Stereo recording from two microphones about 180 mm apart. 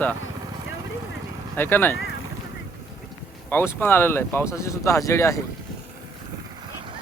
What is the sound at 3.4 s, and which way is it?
Speech, 10° left (ahead or behind).